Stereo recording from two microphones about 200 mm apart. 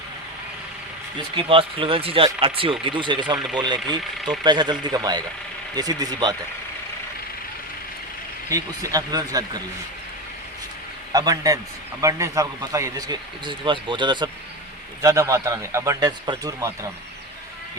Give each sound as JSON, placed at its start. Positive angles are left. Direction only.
{"t": 1.4, "sound": "a man's voice", "side_deg": -25}
{"t": 3.3, "sound": "speech", "side_deg": -5}
{"t": 3.6, "sound": "a man's voice", "side_deg": -20}
{"t": 8.4, "sound": "speech", "side_deg": -15}
{"t": 11.1, "sound": "a man's voice", "side_deg": -20}